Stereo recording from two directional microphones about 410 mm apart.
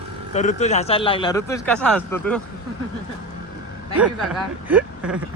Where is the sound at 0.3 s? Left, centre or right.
Centre.